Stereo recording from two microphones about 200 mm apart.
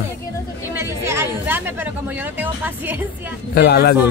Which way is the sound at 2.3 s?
10° right (ahead or behind).